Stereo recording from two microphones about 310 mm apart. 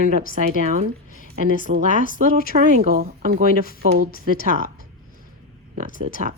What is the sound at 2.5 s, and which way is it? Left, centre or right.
Speech, right.